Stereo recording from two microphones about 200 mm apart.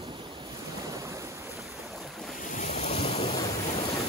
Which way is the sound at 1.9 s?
Centre (ahead or behind).